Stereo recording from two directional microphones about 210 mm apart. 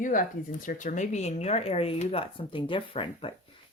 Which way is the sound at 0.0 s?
40° left (ahead or behind).